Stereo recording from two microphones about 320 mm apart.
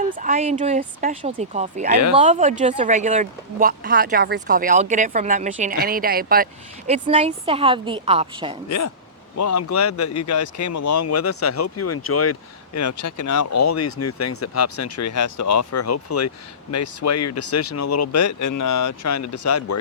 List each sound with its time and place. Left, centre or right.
0.0 s speech: right
9.4 s speech: left